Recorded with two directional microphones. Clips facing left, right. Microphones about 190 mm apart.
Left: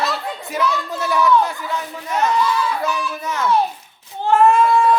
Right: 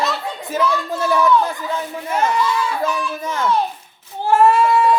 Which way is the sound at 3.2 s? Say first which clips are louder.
Right 1 dB; 30° right (ahead or behind).